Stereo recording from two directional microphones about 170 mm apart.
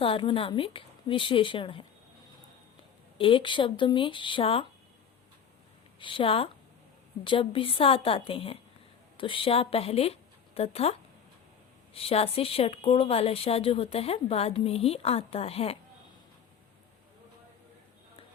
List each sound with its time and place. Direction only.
0.0 s speech: 30° left (ahead or behind)
3.2 s speech: 30° left (ahead or behind)
6.0 s a woman's voice: 30° left (ahead or behind)
11.9 s speech: 35° left (ahead or behind)